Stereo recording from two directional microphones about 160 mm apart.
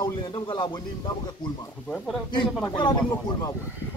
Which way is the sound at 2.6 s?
30° left (ahead or behind).